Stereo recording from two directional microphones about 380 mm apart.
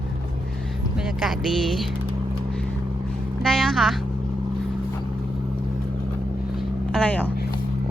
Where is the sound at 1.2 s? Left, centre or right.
Centre.